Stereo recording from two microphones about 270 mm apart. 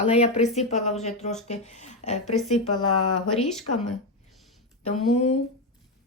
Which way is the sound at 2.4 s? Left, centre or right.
Left.